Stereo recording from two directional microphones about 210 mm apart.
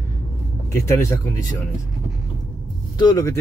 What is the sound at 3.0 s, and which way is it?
Speech, 20° left (ahead or behind).